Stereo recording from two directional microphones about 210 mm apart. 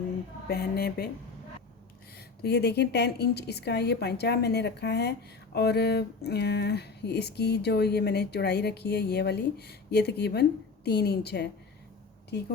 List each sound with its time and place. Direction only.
0.4 s speech: 45° left (ahead or behind)
2.1 s speech: 50° left (ahead or behind)